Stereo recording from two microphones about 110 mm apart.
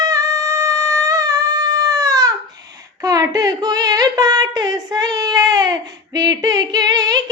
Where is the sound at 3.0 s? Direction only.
35° right (ahead or behind).